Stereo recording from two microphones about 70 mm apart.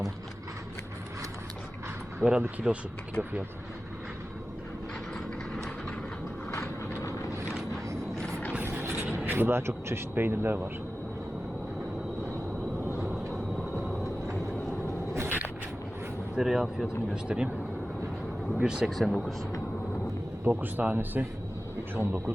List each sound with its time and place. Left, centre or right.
2.2 s speech: centre
6.5 s vehicle: left
8.1 s vehicle: centre
8.6 s vehicle: right
15.1 s a sound: right
16.3 s speech: centre
18.6 s speech: centre
18.9 s speech: centre
20.6 s speech: right